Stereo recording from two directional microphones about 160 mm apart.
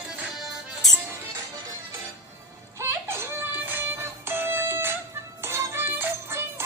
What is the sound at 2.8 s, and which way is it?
Music, 15° right (ahead or behind).